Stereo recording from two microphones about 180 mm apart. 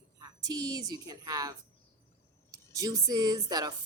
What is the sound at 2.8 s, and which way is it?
Speech, 20° right (ahead or behind).